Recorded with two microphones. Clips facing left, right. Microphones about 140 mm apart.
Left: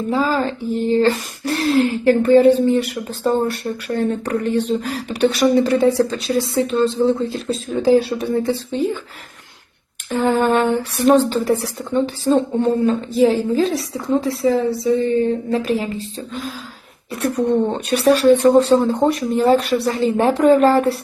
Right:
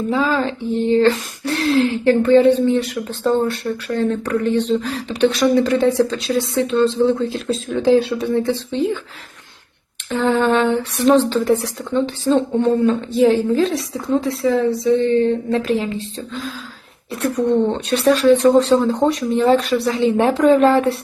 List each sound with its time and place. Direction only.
0.1 s a woman's voice: centre (ahead or behind)
8.1 s speech: 25° left (ahead or behind)
10.1 s a woman's voice: centre (ahead or behind)